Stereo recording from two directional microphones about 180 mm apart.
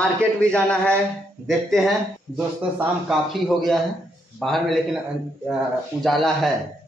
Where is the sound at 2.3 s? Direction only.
Centre (ahead or behind).